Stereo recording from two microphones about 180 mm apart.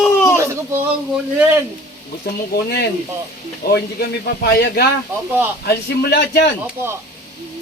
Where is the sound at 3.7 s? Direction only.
60° left (ahead or behind).